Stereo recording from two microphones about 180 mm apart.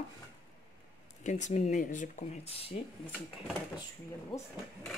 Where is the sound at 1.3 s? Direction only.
40° left (ahead or behind).